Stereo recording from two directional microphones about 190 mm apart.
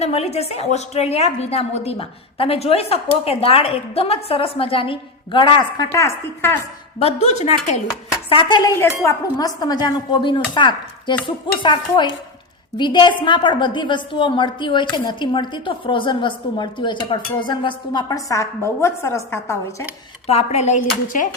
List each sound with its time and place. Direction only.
0.0 s a woman's voice: 35° left (ahead or behind); by 6.6 s 15° left (ahead or behind)
7.0 s a woman's voice: 35° left (ahead or behind)
8.3 s a woman's voice: 25° left (ahead or behind)
20.2 s a woman's voice: 35° left (ahead or behind)